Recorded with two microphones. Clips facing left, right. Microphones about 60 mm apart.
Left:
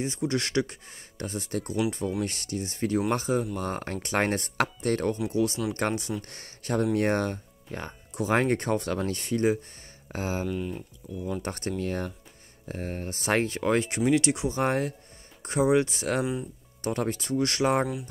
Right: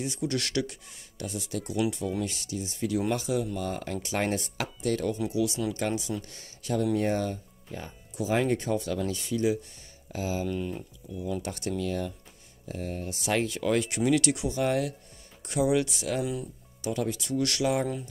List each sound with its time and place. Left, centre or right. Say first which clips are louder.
0.0 s speech: left 2 dB; left
10.5 s speech: even; centre
11.4 s speech: left 1 dB; left